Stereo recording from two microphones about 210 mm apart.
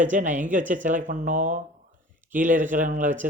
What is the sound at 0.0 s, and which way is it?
Speech, 35° right (ahead or behind).